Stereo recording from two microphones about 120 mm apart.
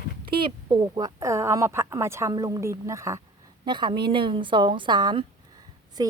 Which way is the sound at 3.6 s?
40° right (ahead or behind).